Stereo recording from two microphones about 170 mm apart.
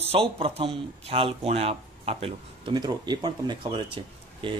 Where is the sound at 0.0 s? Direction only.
35° right (ahead or behind).